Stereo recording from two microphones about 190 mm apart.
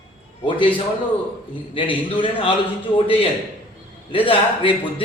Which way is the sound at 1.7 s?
25° left (ahead or behind).